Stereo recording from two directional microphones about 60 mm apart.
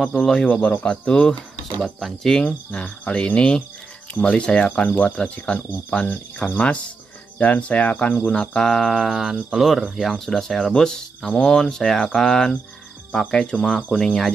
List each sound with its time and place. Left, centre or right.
0.0 s speech: centre
0.4 s speech: left
1.8 s speech: centre
2.4 s speech: centre